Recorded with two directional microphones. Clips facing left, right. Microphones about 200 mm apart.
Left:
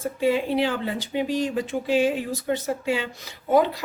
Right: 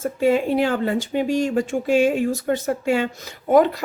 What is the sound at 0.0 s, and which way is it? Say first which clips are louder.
Speech: right 4 dB; 50° right (ahead or behind).